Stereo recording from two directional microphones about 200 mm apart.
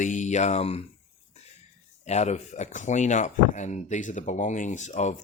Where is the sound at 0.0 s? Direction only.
40° left (ahead or behind).